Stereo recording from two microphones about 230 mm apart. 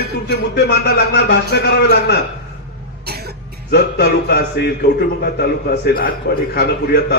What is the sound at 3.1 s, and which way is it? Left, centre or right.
Cough, right.